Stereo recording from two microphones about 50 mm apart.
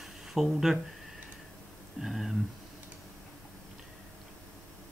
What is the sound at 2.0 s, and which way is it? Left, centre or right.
Speech, centre.